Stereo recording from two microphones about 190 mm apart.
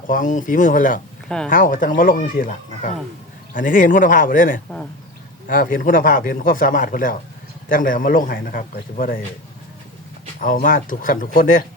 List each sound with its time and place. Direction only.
0.1 s speech: 45° left (ahead or behind)
10.4 s speech: 45° left (ahead or behind)